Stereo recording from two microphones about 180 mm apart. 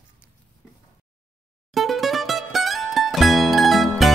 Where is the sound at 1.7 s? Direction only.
Centre (ahead or behind).